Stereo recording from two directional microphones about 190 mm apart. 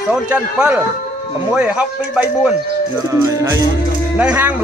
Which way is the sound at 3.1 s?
15° right (ahead or behind).